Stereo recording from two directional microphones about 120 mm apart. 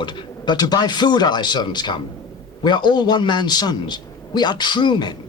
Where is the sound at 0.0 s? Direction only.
35° left (ahead or behind).